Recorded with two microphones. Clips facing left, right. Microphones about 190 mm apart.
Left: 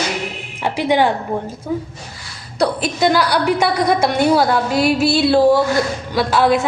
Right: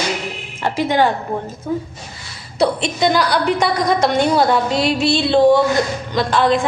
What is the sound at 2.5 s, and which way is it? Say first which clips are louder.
A woman's voice: right 1 dB; centre (ahead or behind).